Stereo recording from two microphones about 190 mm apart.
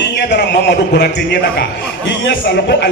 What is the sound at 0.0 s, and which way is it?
A man's voice, 65° left (ahead or behind).